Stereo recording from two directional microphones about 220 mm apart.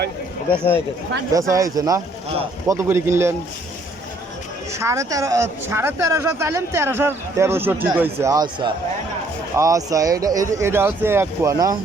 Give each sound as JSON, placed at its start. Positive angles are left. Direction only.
{"t": 1.3, "sound": "speech", "side_deg": -15}
{"t": 4.7, "sound": "speech", "side_deg": -15}